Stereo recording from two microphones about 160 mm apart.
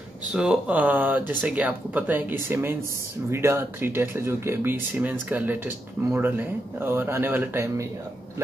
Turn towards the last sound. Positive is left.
turn(degrees=-20)  # may be behind; listen again after turning